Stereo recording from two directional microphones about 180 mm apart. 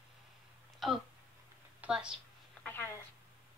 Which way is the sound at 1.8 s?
5° right (ahead or behind).